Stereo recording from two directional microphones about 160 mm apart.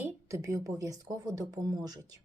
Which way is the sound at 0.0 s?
20° right (ahead or behind).